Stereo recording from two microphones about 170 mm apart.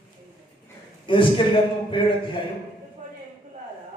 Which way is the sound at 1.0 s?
30° left (ahead or behind).